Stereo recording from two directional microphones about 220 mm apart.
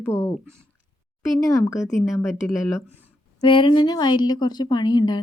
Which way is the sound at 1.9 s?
Centre (ahead or behind).